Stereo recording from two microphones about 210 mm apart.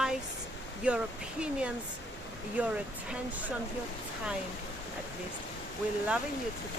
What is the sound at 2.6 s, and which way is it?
Speech, 5° right (ahead or behind).